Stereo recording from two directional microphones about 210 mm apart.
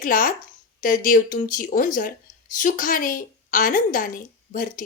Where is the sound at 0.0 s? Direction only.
40° left (ahead or behind).